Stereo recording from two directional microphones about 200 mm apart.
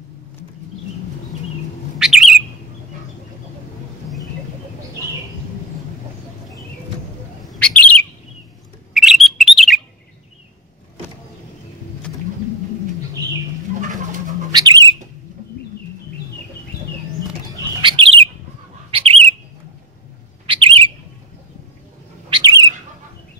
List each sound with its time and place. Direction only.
2.0 s bird: centre (ahead or behind)
7.4 s bird: 5° left (ahead or behind)
8.9 s bird: centre (ahead or behind)
14.5 s bird: 20° right (ahead or behind)
17.2 s bird: 20° right (ahead or behind)
20.4 s bird: 25° right (ahead or behind)
22.3 s bird: 20° right (ahead or behind)